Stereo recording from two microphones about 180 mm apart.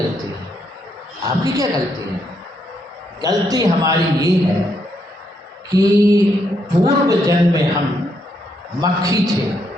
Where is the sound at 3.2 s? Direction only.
20° right (ahead or behind).